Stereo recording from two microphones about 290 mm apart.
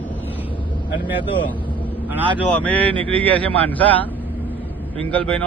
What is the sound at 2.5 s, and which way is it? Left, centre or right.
A man's voice, centre.